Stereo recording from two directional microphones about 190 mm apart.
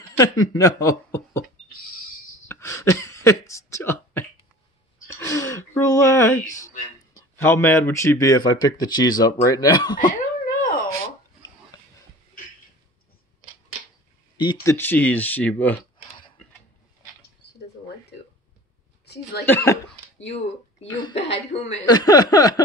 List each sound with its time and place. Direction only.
0.2 s speech: 20° left (ahead or behind)
2.4 s a sound: 15° left (ahead or behind)
7.2 s speech: 10° left (ahead or behind)
9.9 s a sound: 45° left (ahead or behind)
14.4 s speech: 20° left (ahead or behind)
19.1 s a sound: 60° left (ahead or behind)
19.4 s speech: 10° left (ahead or behind)
20.2 s speech: 35° left (ahead or behind)
21.5 s a woman's voice: 35° left (ahead or behind)
21.8 s speech: 20° left (ahead or behind)